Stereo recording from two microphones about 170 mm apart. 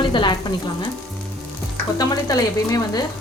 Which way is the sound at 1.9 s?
20° left (ahead or behind).